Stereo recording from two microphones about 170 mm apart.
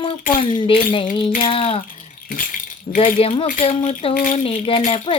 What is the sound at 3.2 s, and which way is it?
Child singing, 35° left (ahead or behind).